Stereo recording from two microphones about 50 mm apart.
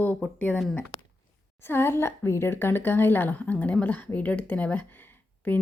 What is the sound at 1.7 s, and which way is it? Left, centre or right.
A woman's voice, left.